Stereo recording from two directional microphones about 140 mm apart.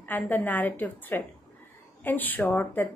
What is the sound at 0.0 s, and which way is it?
Speech, 10° left (ahead or behind).